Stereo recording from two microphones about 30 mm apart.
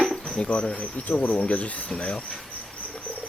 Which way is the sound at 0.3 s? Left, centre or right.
Left.